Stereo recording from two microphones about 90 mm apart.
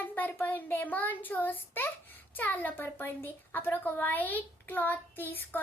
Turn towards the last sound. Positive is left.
turn(degrees=20)  # may be behind; listen again after turning